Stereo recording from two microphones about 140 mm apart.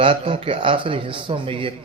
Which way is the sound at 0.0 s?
40° right (ahead or behind).